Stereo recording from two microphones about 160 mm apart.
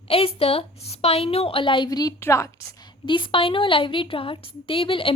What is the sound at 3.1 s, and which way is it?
A woman's voice, 30° left (ahead or behind).